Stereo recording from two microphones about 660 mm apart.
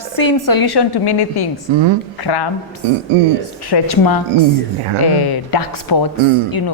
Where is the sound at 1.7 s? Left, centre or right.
Right.